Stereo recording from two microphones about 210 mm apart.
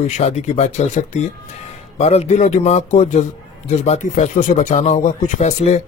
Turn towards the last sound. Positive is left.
turn(degrees=35)  # may be behind; listen again after turning